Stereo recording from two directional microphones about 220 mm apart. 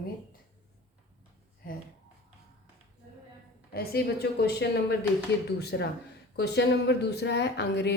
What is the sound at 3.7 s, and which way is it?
Speech, 45° left (ahead or behind).